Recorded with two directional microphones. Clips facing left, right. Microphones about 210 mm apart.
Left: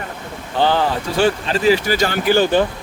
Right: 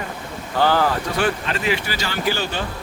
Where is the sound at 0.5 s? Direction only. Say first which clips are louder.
Left 1 dB; 20° left (ahead or behind); by 2.6 s 50° left (ahead or behind).